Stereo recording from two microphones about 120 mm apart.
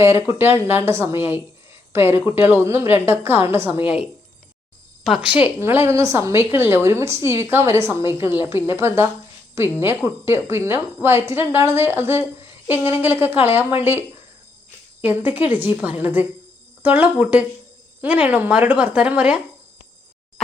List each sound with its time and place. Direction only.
0.0 s a woman's voice: 20° right (ahead or behind)
15.0 s speech: 15° right (ahead or behind)